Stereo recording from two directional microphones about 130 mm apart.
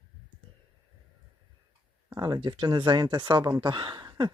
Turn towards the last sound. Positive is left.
turn(degrees=-30)  # may be behind; listen again after turning